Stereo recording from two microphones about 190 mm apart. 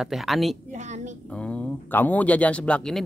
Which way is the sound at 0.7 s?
40° right (ahead or behind).